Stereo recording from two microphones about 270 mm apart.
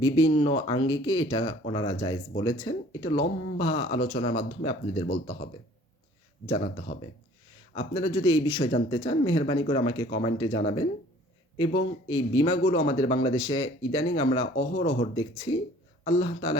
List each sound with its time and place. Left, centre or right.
0.0 s speech: centre
6.5 s speech: centre
12.0 s speech: centre